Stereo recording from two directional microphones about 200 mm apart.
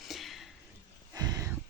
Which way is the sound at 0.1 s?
Centre (ahead or behind).